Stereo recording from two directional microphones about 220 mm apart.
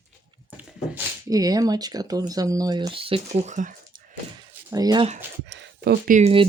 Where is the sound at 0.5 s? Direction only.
10° right (ahead or behind); by 4.0 s 35° right (ahead or behind).